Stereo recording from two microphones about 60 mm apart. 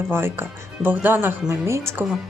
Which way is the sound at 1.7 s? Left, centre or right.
Right.